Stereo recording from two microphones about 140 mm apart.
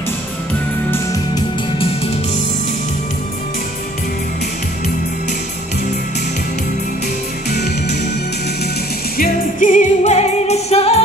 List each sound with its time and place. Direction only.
0.9 s music: 25° left (ahead or behind)
9.2 s music: 70° left (ahead or behind); by 11.0 s 45° left (ahead or behind)